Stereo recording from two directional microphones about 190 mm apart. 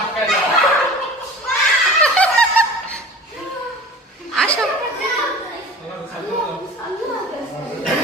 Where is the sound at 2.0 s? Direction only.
5° left (ahead or behind).